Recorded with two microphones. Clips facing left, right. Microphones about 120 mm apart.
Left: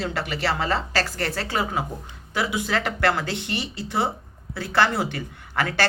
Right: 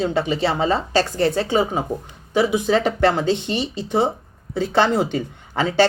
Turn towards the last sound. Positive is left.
turn(degrees=-20)  # may be behind; listen again after turning